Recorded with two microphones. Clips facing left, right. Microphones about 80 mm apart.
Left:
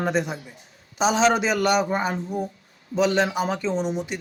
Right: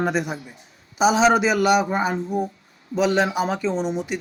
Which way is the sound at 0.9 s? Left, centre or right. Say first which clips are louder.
Right 3 dB; centre.